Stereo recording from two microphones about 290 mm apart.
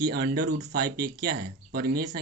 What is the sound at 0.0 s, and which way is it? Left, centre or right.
Speech, right.